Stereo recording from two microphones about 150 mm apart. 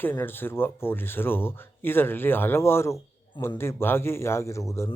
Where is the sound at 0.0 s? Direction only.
15° left (ahead or behind).